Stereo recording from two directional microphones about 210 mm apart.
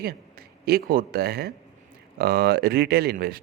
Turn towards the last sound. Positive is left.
turn(degrees=-45)  # may be behind; listen again after turning